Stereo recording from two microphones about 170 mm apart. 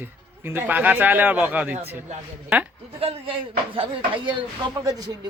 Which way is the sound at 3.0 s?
35° right (ahead or behind).